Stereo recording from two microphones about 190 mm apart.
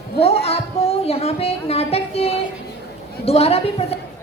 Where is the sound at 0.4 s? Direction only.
30° left (ahead or behind).